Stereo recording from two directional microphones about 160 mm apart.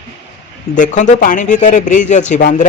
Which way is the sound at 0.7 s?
50° left (ahead or behind).